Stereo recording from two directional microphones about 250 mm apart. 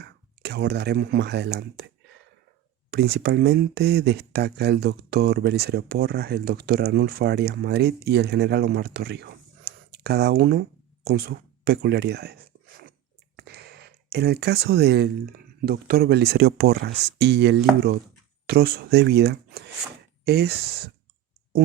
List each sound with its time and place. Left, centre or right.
0.0 s speech: right
2.9 s speech: right